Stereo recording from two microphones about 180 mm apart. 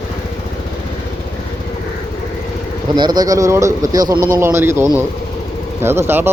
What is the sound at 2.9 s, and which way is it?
Speech, 25° right (ahead or behind).